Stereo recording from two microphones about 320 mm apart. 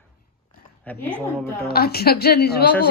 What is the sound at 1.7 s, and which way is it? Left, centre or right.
A woman's voice, left.